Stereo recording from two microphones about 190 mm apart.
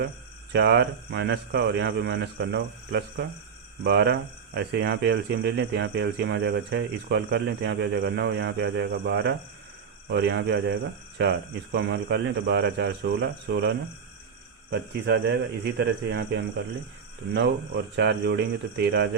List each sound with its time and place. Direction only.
0.5 s speech: 60° right (ahead or behind)
14.7 s speech: 60° right (ahead or behind)